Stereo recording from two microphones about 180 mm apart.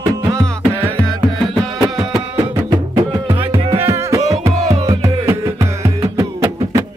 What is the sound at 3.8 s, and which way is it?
Music, 15° right (ahead or behind).